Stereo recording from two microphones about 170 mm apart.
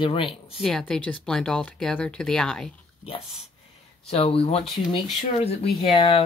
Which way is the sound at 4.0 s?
35° left (ahead or behind).